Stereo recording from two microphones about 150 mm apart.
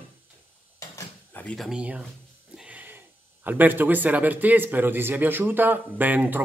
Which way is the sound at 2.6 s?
10° right (ahead or behind).